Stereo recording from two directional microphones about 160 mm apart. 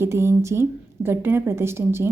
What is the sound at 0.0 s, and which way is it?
A woman's voice, 15° right (ahead or behind).